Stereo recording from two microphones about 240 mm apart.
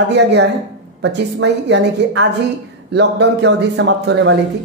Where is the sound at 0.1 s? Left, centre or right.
Right.